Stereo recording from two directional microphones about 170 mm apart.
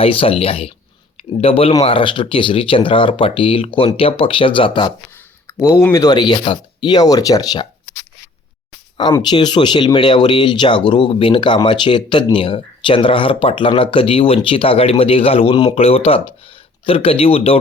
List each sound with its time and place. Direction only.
0.0 s speech: 35° left (ahead or behind)
5.5 s speech: 20° left (ahead or behind)
9.3 s speech: 25° left (ahead or behind)